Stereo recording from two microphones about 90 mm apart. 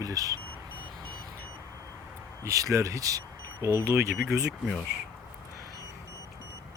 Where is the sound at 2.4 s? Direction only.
35° right (ahead or behind).